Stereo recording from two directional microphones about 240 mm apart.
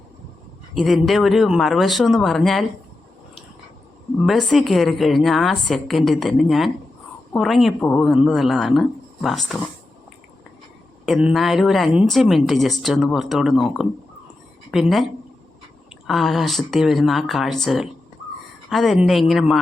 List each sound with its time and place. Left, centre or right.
0.7 s speech: centre
4.2 s speech: centre
11.0 s speech: centre
16.0 s speech: centre